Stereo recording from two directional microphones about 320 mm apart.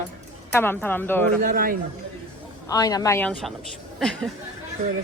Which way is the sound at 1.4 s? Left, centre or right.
Right.